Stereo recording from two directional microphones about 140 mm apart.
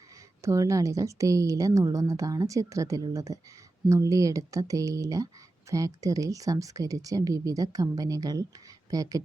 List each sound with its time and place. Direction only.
0.4 s speech: 20° right (ahead or behind)